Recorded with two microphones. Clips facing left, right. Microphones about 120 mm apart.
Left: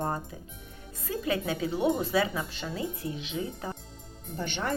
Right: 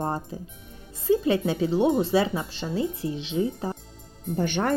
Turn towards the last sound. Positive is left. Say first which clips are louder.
# right 7 dB
turn(degrees=-50)  # may be behind; listen again after turning